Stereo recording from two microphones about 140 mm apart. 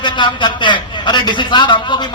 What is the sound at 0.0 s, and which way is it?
A man's voice, 35° left (ahead or behind).